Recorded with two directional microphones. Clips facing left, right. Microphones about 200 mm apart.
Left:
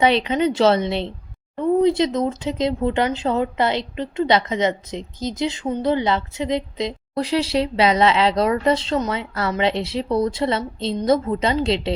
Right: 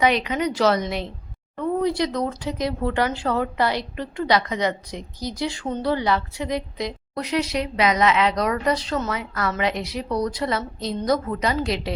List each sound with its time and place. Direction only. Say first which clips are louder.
0.0 s speech: left 3 dB; 30° left (ahead or behind)